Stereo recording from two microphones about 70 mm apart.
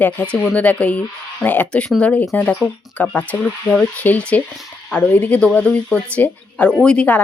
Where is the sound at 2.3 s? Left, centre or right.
Left.